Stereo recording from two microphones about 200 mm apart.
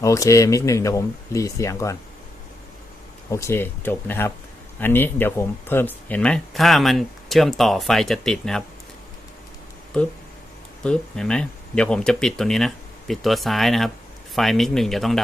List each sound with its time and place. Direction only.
0.0 s speech: 15° left (ahead or behind)
3.2 s speech: 15° left (ahead or behind)
10.8 s speech: 5° left (ahead or behind)